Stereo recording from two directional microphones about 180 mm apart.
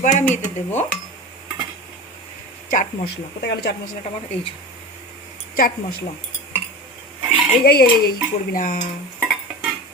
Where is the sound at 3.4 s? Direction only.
65° left (ahead or behind).